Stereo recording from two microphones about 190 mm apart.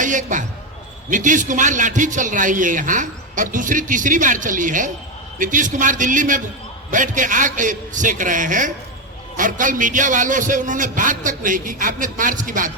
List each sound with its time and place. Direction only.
0.0 s basketball bounce: 40° right (ahead or behind)
1.1 s a man's voice: 40° right (ahead or behind)